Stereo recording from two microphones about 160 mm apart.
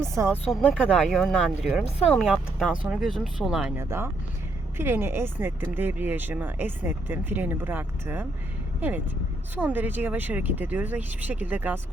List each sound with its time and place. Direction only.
0.0 s speech: 20° right (ahead or behind)
0.8 s speech: centre (ahead or behind)
3.8 s speech: 15° right (ahead or behind)
9.6 s speech: 10° right (ahead or behind)